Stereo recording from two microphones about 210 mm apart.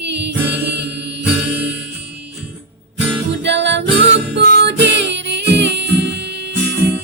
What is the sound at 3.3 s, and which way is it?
Music, 55° right (ahead or behind).